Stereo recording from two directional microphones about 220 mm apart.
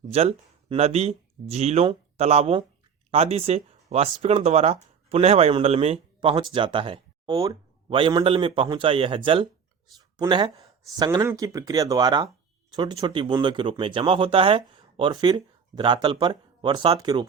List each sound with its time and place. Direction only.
0.1 s speech: 30° right (ahead or behind)